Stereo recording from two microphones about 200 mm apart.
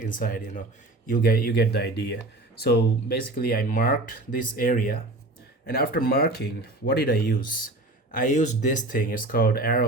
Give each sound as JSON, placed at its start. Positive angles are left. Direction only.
{"t": 0.0, "sound": "speech", "side_deg": 45}